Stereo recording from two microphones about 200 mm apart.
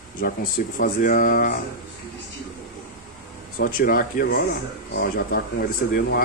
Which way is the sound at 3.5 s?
45° left (ahead or behind).